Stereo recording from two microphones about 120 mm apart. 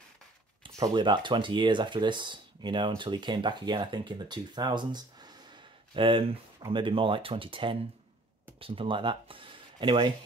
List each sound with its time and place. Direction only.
0.7 s speech: 35° right (ahead or behind)